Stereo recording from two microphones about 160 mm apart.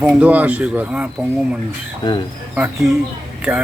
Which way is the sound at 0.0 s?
10° right (ahead or behind).